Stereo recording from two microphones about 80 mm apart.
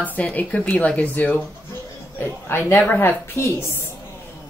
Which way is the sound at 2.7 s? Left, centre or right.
Left.